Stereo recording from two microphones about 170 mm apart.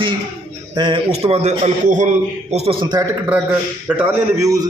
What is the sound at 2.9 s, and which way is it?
A man's voice, 15° right (ahead or behind).